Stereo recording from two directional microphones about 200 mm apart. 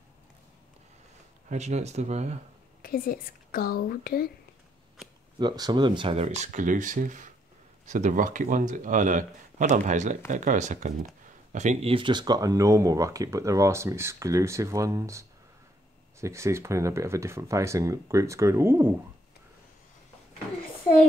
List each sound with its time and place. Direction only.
1.5 s speech: 35° right (ahead or behind)
2.8 s speech: 45° left (ahead or behind)
5.4 s speech: 20° right (ahead or behind)